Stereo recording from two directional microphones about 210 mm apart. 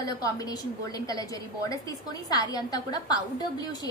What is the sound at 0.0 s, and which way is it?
A woman's voice, 15° left (ahead or behind).